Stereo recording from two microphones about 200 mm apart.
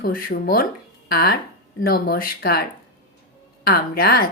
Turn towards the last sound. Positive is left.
turn(degrees=50)  # may be behind; listen again after turning